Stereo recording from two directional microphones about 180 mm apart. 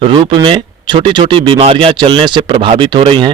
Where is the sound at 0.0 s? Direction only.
30° right (ahead or behind).